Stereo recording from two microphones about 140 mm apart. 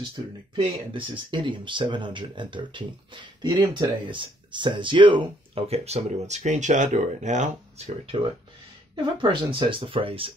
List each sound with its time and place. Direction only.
0.6 s speech: 35° right (ahead or behind); by 7.9 s 60° right (ahead or behind)
8.9 s speech: 35° right (ahead or behind)